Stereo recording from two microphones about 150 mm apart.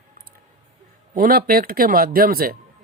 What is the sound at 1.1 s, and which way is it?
A man's voice, 70° right (ahead or behind).